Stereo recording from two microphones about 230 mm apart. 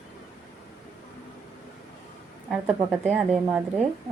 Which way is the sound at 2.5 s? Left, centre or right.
Centre.